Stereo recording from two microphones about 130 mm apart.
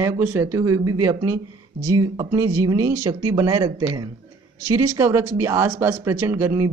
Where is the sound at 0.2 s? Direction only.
20° right (ahead or behind).